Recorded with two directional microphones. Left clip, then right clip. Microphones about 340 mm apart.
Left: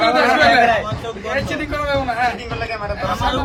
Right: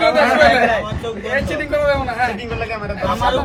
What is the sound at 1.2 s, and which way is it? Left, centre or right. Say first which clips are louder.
A man's voice: right 2 dB; centre.